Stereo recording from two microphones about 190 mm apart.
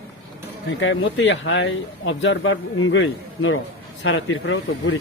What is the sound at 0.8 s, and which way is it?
Speech, 80° left.